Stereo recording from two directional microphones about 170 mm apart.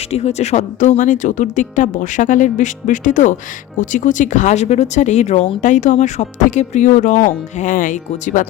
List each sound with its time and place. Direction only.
0.1 s a woman's voice: 40° left (ahead or behind)